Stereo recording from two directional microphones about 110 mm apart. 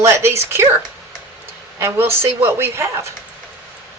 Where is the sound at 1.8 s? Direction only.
20° right (ahead or behind).